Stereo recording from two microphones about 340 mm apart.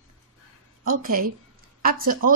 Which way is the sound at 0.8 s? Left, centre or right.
Right.